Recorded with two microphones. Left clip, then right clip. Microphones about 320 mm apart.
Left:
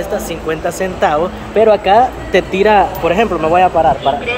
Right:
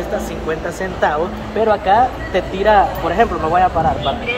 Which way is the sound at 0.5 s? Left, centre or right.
Left.